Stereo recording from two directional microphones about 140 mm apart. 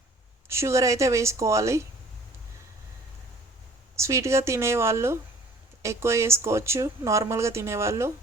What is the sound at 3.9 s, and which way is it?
Speech, 20° right (ahead or behind).